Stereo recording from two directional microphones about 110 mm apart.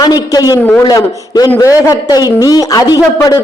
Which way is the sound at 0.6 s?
15° left (ahead or behind).